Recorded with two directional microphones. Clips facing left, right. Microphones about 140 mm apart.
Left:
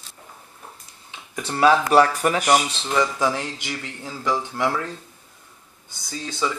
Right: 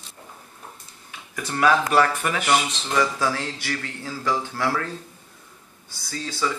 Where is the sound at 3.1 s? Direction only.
20° left (ahead or behind).